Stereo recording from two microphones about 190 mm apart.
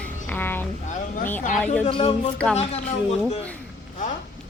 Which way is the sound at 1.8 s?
30° left (ahead or behind).